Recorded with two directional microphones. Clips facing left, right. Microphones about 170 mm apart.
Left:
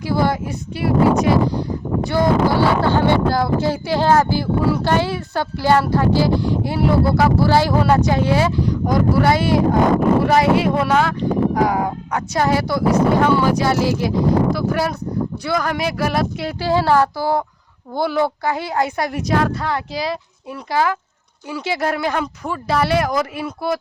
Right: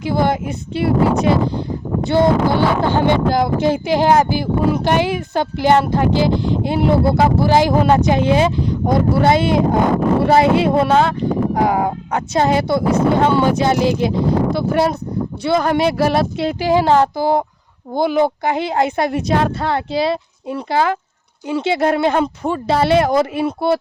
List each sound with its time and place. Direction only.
0.0 s speech: 20° right (ahead or behind)